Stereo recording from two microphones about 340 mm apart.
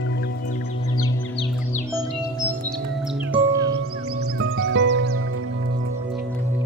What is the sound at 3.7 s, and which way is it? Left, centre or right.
Music, right.